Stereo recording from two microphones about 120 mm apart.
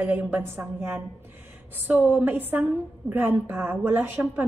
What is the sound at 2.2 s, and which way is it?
Speech, 15° right (ahead or behind).